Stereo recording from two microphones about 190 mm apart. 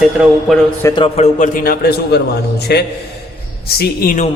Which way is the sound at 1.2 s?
40° left (ahead or behind).